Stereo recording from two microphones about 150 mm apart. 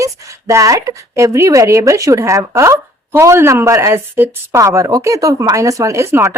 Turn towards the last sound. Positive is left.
turn(degrees=-20)  # may be behind; listen again after turning